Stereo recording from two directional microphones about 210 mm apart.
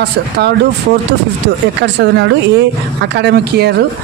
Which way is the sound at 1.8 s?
55° right (ahead or behind).